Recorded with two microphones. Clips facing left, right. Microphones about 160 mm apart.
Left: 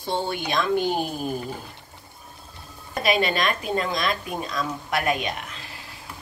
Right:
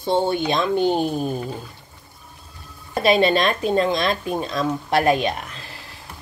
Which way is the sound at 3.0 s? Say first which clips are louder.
Right 6 dB; 25° right (ahead or behind).